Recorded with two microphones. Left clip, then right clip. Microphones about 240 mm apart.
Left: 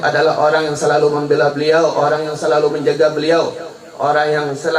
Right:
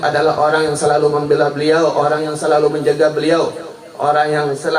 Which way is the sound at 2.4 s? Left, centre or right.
Right.